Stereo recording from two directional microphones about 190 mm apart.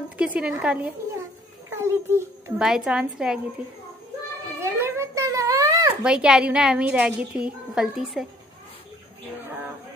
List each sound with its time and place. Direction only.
0.2 s a woman's voice: 5° right (ahead or behind)
4.6 s a sound: 15° right (ahead or behind)
6.0 s a woman's voice: 5° right (ahead or behind)